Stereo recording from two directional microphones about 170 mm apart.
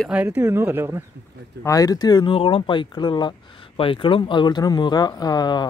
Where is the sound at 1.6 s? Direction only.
20° left (ahead or behind).